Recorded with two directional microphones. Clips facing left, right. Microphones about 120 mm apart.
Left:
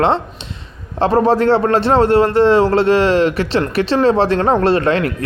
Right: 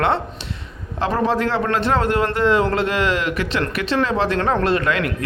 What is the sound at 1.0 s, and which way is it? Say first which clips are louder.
A man's voice: left 7 dB; 35° left (ahead or behind).